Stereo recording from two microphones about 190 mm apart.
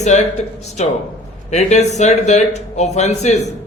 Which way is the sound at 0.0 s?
35° left (ahead or behind).